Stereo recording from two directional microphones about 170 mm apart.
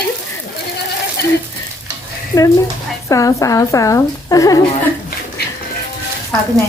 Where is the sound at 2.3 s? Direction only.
15° left (ahead or behind).